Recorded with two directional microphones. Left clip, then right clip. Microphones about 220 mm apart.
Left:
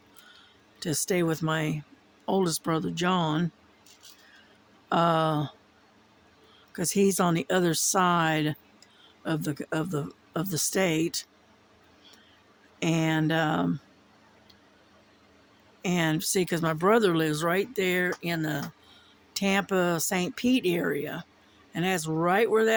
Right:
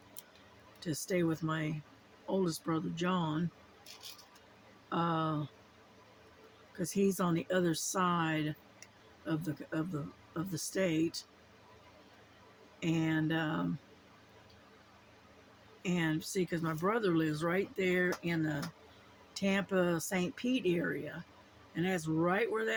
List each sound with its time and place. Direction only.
0.8 s speech: 55° left (ahead or behind)
4.9 s speech: 55° left (ahead or behind)
6.7 s speech: 55° left (ahead or behind)
12.8 s speech: 50° left (ahead or behind)
15.8 s speech: 50° left (ahead or behind)